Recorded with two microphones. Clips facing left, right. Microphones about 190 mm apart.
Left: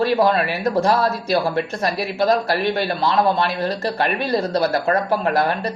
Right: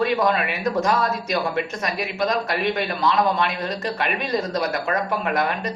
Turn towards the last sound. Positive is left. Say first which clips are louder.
# left 4 dB
turn(degrees=30)  # may be behind; listen again after turning